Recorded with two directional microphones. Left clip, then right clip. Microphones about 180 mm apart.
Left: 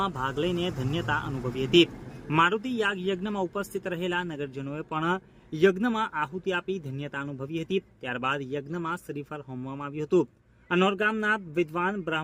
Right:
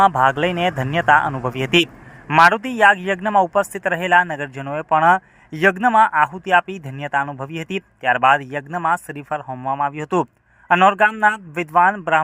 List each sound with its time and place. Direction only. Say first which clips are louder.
0.0 s a man's voice: right 14 dB; 30° right (ahead or behind)